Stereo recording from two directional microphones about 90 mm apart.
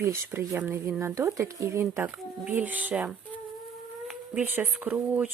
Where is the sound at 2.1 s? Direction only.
20° right (ahead or behind).